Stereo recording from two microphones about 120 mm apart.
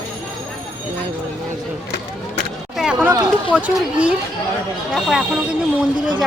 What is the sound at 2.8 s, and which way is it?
Chatter, 10° right (ahead or behind).